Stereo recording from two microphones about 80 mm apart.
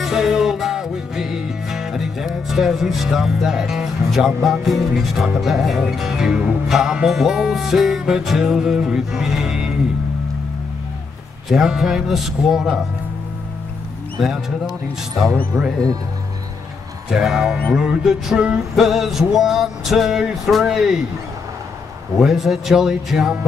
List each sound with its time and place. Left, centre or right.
0.0 s music: centre
11.4 s music: centre
15.2 s speech: centre
17.1 s music: centre
22.2 s music: centre